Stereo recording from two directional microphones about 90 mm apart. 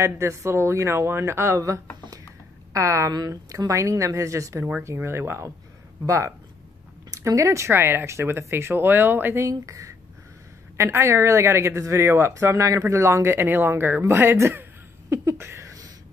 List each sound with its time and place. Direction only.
0.0 s speech: 30° right (ahead or behind)
9.5 s speech: 35° right (ahead or behind)